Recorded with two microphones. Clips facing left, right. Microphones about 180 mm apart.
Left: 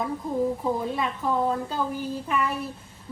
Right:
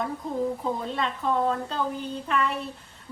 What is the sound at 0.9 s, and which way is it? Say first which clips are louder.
A woman's voice: even; 5° left (ahead or behind).